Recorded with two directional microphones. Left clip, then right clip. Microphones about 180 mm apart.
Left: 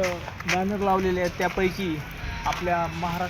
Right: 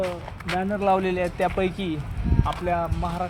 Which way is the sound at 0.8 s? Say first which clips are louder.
Right 4 dB; 15° right (ahead or behind).